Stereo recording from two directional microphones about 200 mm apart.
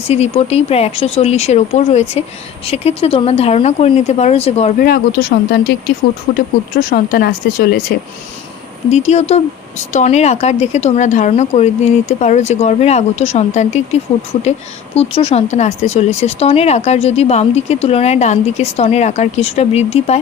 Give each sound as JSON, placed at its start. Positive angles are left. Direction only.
{"t": 0.1, "sound": "speech", "side_deg": 30}
{"t": 4.8, "sound": "speech", "side_deg": 50}
{"t": 8.9, "sound": "speech", "side_deg": 35}